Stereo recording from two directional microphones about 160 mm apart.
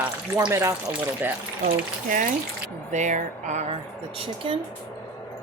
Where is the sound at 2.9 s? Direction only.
50° right (ahead or behind).